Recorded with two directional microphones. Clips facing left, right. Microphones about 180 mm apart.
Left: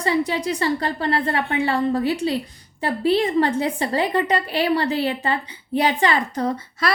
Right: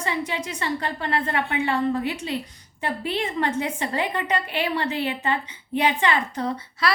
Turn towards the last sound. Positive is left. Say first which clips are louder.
# left 2 dB
turn(degrees=45)  # may be behind; listen again after turning